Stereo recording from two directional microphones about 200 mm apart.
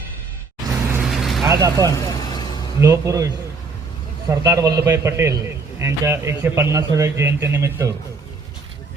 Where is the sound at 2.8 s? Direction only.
15° right (ahead or behind).